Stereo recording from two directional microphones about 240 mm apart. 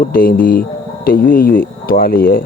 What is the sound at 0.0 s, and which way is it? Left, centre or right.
Speech, left.